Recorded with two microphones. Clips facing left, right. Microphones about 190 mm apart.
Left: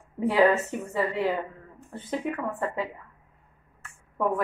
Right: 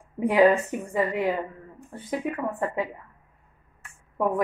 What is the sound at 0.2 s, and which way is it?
Speech, 15° right (ahead or behind).